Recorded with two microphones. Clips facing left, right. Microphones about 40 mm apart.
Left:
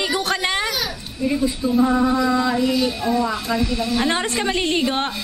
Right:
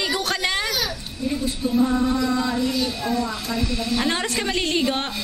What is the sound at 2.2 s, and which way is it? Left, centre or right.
Speech, centre.